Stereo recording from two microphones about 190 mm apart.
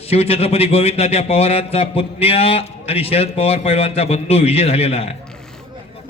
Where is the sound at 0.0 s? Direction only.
30° left (ahead or behind).